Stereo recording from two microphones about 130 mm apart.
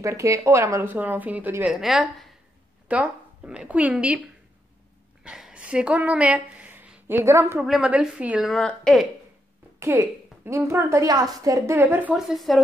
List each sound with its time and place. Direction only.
0.0 s a woman's voice: 25° right (ahead or behind)
1.7 s a woman's voice: centre (ahead or behind)
5.2 s speech: 5° right (ahead or behind)
7.6 s a woman's voice: 5° right (ahead or behind)
8.5 s a woman's voice: 5° left (ahead or behind)
9.8 s a woman's voice: 20° right (ahead or behind); by 12.6 s centre (ahead or behind)